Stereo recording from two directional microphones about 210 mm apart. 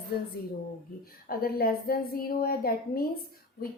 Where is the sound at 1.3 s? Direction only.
45° left (ahead or behind).